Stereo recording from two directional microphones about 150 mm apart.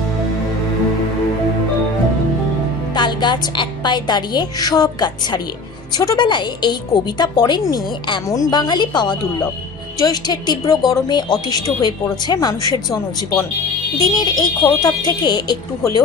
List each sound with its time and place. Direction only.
3.0 s a woman's voice: 30° left (ahead or behind)
13.9 s a woman's voice: 25° left (ahead or behind)